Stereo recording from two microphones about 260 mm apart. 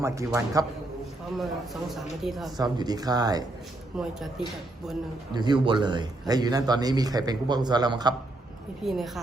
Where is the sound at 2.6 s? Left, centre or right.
Centre.